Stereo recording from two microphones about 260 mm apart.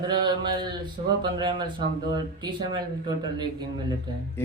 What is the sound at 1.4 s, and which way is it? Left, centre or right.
Mantra, centre.